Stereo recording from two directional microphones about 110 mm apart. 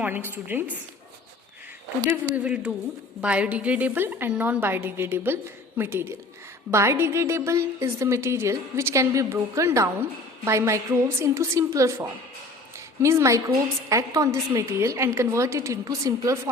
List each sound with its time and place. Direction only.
0.0 s a woman's voice: 15° right (ahead or behind)
2.3 s a woman's voice: 10° right (ahead or behind); by 12.0 s 25° right (ahead or behind)
12.7 s a sound: 25° right (ahead or behind)
13.9 s a woman's voice: 30° right (ahead or behind)